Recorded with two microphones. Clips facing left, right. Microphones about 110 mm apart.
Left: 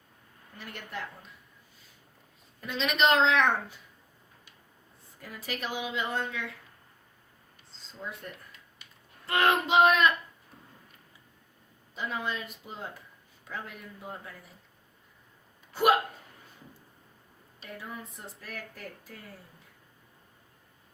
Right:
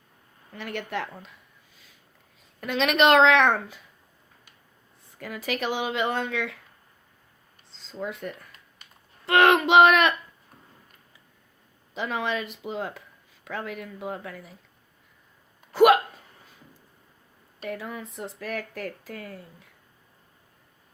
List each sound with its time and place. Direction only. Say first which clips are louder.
0.5 s speech: right 9 dB; 90° right
2.6 s a woman's voice: right 5 dB; 70° right (ahead or behind)
5.1 s speech: right 7 dB; 90° right
8.0 s speech: right 7 dB; 90° right; by 10.2 s 75° right (ahead or behind)
11.9 s speech: right 6 dB; 90° right
15.7 s speech: right 7 dB; 90° right
17.7 s speech: right 7 dB; 90° right